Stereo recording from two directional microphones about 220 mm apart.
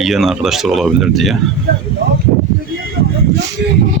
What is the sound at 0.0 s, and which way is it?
Speech, centre (ahead or behind).